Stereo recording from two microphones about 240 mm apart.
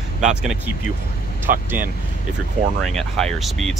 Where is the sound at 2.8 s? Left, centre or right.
Centre.